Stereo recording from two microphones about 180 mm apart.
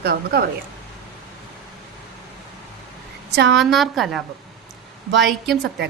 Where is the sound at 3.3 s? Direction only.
70° right (ahead or behind).